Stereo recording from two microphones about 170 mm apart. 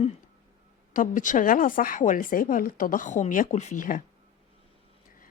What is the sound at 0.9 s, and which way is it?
Speech, 50° left (ahead or behind).